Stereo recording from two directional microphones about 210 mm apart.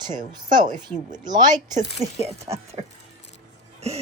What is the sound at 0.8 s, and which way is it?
Speech, 20° right (ahead or behind).